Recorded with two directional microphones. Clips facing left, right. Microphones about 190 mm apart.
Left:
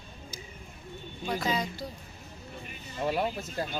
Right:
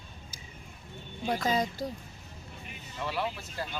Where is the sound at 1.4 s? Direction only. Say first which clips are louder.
Right 4 dB; 45° right (ahead or behind).